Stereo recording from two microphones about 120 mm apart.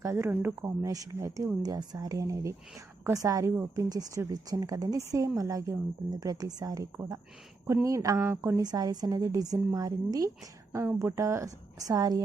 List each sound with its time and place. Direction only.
0.0 s a woman's voice: 25° right (ahead or behind)
8.6 s a woman's voice: 35° right (ahead or behind)